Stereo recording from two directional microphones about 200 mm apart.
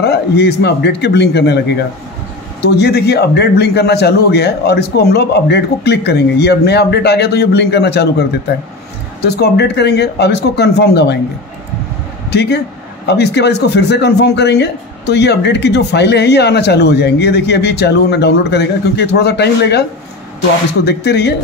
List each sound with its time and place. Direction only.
0.0 s a man's voice: 55° left (ahead or behind)
12.3 s a man's voice: 55° left (ahead or behind)